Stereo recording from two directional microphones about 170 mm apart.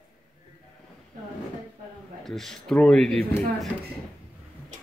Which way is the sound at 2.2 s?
Centre (ahead or behind).